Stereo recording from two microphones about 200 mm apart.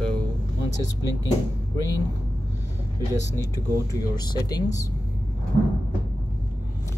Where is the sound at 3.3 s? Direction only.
15° left (ahead or behind).